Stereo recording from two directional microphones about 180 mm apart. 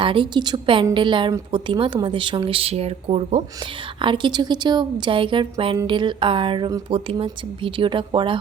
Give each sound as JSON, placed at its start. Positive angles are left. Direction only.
{"t": 0.0, "sound": "a woman's voice", "side_deg": -30}